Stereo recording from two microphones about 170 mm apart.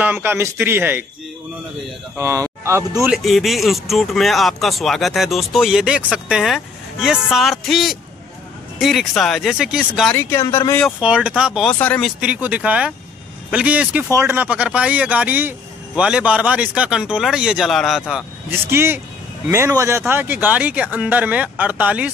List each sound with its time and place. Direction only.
0.0 s speech: 10° right (ahead or behind)
2.1 s speech: 15° right (ahead or behind)
3.1 s speech: centre (ahead or behind)
10.1 s speech: 20° left (ahead or behind)
11.0 s speech: 5° right (ahead or behind)
11.8 s speech: 10° left (ahead or behind)
12.2 s speech: 10° right (ahead or behind)
18.7 s speech: 15° right (ahead or behind)